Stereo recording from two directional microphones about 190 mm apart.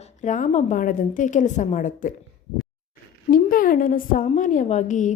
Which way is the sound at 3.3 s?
45° left (ahead or behind).